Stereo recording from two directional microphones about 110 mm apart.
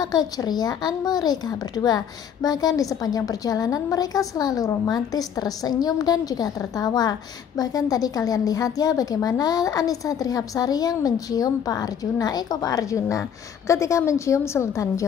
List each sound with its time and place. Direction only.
0.0 s a woman's voice: 35° left (ahead or behind)